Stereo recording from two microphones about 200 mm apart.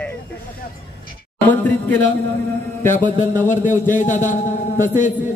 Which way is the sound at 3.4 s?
40° left (ahead or behind).